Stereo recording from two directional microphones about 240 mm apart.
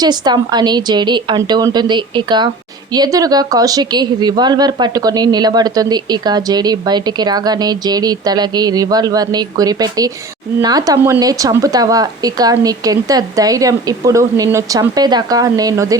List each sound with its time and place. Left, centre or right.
0.0 s speech: centre